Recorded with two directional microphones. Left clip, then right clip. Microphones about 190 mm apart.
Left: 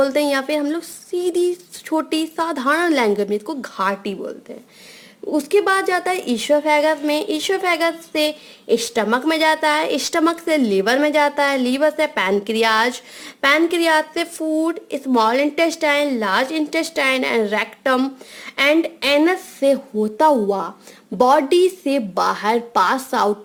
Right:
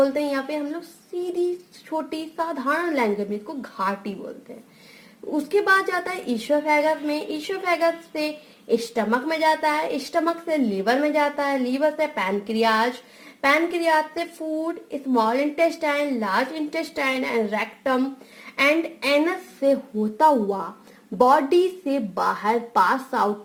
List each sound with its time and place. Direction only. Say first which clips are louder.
0.0 s speech: left 4 dB; 30° left (ahead or behind)
1.9 s speech: left 8 dB; 30° left (ahead or behind)
5.3 s speech: left 3 dB; 20° left (ahead or behind)